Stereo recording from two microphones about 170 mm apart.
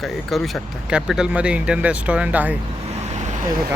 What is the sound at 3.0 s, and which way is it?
Vehicle, 45° right (ahead or behind).